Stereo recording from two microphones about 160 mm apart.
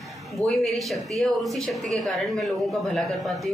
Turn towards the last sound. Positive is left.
turn(degrees=0)  # may be behind; listen again after turning